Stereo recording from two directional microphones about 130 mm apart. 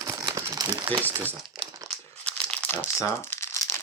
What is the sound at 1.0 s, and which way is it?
Speech, 15° right (ahead or behind).